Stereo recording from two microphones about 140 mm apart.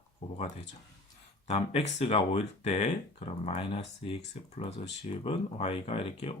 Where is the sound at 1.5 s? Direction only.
45° left (ahead or behind).